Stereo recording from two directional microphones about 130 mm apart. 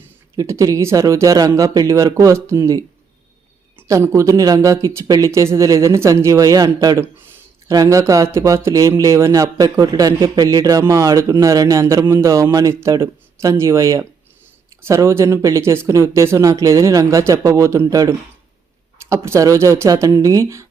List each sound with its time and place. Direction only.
0.3 s speech: 25° right (ahead or behind)